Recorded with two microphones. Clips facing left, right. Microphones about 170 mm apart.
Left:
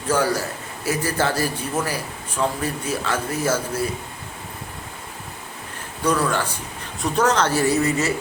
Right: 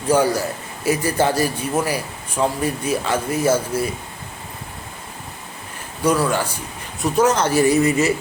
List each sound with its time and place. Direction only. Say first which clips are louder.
0.1 s a man's voice: right 4 dB; 15° right (ahead or behind)
6.1 s a man's voice: right 3 dB; 10° right (ahead or behind)